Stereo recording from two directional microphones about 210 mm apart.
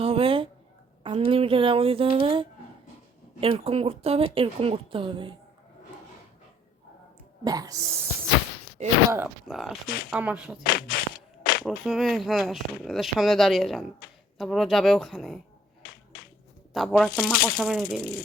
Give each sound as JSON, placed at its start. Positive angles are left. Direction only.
{"t": 0.0, "sound": "a sound", "side_deg": -25}
{"t": 1.0, "sound": "speech", "side_deg": -25}
{"t": 7.4, "sound": "speech", "side_deg": -15}
{"t": 8.8, "sound": "speech", "side_deg": -35}
{"t": 9.1, "sound": "speech", "side_deg": -5}
{"t": 9.8, "sound": "speech", "side_deg": 45}
{"t": 10.1, "sound": "speech", "side_deg": -5}
{"t": 10.6, "sound": "a sound", "side_deg": 45}
{"t": 11.6, "sound": "speech", "side_deg": 0}
{"t": 16.7, "sound": "speech", "side_deg": 0}
{"t": 17.1, "sound": "speech", "side_deg": 45}
{"t": 17.6, "sound": "speech", "side_deg": -5}